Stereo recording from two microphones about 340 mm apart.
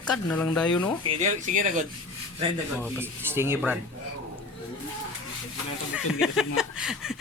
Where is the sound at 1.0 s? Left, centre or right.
Centre.